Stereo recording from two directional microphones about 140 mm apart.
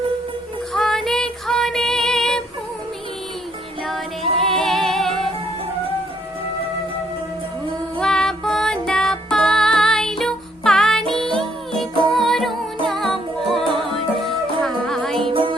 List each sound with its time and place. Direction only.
0.7 s female singing: 5° left (ahead or behind)
3.8 s music: centre (ahead or behind)
7.9 s music: 5° left (ahead or behind)
15.3 s music: 40° right (ahead or behind)